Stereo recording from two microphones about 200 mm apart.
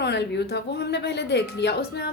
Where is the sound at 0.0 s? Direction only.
60° left (ahead or behind).